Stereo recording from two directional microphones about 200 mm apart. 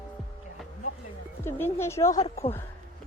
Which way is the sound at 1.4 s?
10° left (ahead or behind).